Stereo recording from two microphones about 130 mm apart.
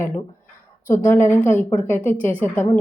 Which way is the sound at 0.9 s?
80° left.